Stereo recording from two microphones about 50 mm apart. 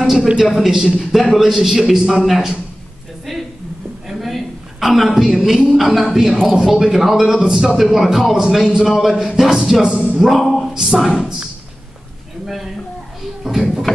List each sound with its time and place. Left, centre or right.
0.5 s a man's voice: centre
4.1 s a sound: centre
5.8 s a man's voice: centre
9.8 s speech: right
10.1 s speech: centre
13.4 s a sound: centre